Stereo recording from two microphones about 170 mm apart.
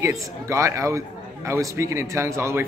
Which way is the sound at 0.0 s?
20° right (ahead or behind).